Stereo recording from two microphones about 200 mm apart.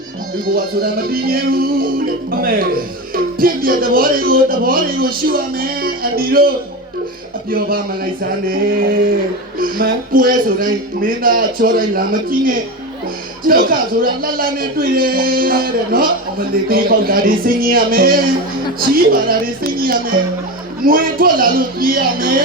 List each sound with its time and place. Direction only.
0.4 s a man's voice: 50° right (ahead or behind)
7.5 s a man's voice: 45° right (ahead or behind)